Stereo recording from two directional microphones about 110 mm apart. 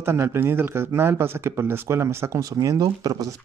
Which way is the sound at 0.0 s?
25° right (ahead or behind).